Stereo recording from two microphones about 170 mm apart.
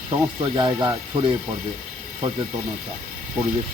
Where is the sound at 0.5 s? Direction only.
30° right (ahead or behind).